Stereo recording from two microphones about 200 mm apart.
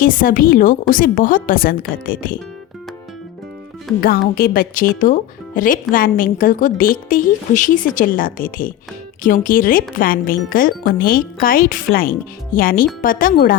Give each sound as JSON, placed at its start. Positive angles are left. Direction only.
{"t": 0.0, "sound": "a woman's voice", "side_deg": 45}
{"t": 4.0, "sound": "a woman's voice", "side_deg": 50}